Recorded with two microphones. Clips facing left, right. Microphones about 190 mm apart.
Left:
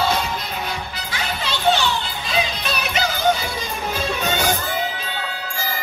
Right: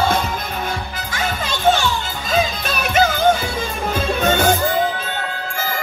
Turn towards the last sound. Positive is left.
turn(degrees=-50)  # may be behind; listen again after turning